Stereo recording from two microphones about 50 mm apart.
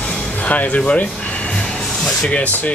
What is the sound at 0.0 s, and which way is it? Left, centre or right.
Music, left.